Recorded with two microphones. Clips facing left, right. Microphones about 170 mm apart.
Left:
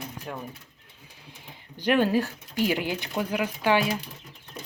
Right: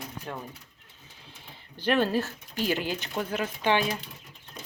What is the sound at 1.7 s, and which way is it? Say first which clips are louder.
Speech: left 3 dB; 15° left (ahead or behind).